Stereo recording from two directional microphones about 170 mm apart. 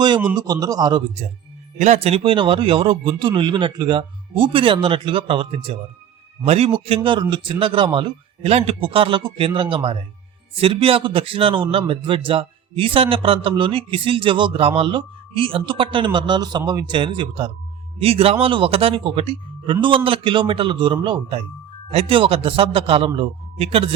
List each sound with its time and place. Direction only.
0.3 s speech: 20° right (ahead or behind)
1.8 s a man's voice: 40° right (ahead or behind)